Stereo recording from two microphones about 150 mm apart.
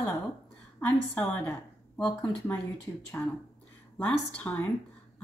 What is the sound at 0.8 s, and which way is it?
A woman's voice, 10° left (ahead or behind).